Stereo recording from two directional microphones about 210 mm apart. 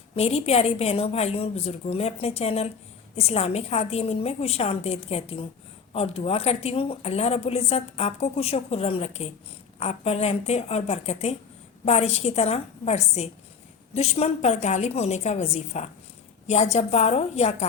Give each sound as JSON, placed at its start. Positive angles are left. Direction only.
{"t": 0.2, "sound": "a woman's voice", "side_deg": 30}